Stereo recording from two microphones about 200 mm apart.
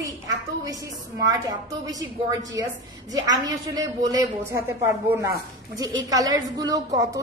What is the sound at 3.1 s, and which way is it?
A woman's voice, 20° right (ahead or behind).